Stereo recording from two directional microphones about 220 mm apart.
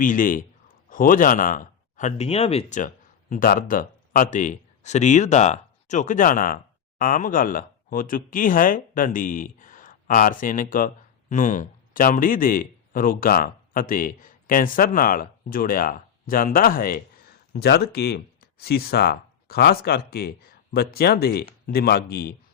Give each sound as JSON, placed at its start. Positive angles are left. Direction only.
{"t": 0.0, "sound": "a man's voice", "side_deg": 35}